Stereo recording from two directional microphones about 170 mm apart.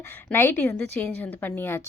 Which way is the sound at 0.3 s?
10° left (ahead or behind).